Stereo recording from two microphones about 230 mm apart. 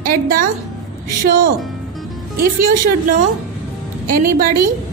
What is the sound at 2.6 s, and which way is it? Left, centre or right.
A woman's voice, right.